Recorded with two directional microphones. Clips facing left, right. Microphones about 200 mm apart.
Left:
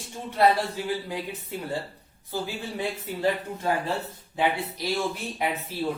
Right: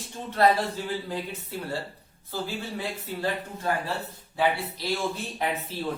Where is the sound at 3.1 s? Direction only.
15° left (ahead or behind).